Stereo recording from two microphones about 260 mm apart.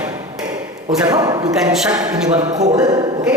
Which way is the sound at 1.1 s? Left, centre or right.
Centre.